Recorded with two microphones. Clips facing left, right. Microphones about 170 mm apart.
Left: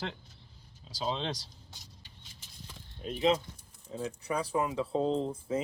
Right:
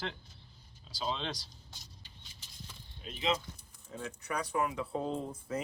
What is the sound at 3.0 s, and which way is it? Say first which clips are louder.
Speech: left 6 dB; 40° left (ahead or behind).